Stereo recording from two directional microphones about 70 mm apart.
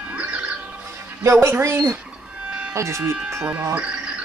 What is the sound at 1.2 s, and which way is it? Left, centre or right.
Speech, right.